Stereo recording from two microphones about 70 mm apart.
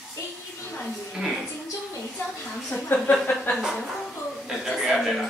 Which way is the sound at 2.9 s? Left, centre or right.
Left.